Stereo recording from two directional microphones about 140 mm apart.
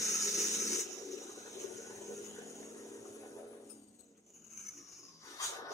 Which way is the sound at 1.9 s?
25° left (ahead or behind).